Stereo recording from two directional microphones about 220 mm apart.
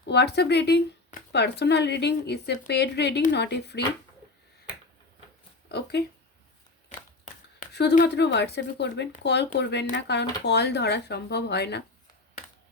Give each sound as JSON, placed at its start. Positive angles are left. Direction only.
{"t": 0.0, "sound": "speech", "side_deg": 50}
{"t": 5.6, "sound": "speech", "side_deg": 50}
{"t": 7.7, "sound": "speech", "side_deg": 50}